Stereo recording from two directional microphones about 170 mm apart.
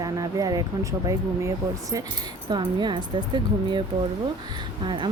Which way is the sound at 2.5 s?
25° right (ahead or behind).